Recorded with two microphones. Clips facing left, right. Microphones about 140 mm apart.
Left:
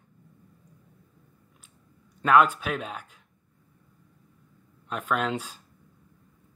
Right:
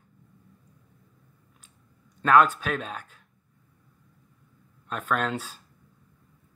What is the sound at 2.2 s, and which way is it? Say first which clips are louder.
Speech: even; 10° left (ahead or behind).